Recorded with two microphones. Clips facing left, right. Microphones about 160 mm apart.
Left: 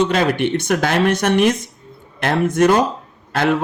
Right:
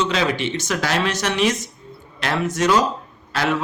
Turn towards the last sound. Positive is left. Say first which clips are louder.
# left 4 dB
turn(degrees=55)  # may be behind; listen again after turning